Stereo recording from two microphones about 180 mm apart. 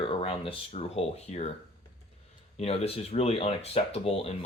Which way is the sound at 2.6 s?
35° left (ahead or behind).